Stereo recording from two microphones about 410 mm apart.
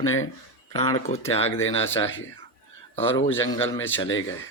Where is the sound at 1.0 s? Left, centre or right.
Centre.